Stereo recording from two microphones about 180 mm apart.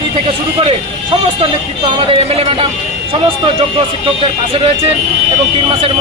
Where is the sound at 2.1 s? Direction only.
30° right (ahead or behind).